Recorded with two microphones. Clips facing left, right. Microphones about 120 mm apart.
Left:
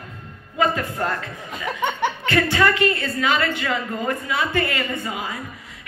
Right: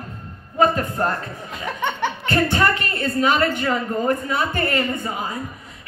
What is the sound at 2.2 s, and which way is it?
A woman's voice, 40° right (ahead or behind).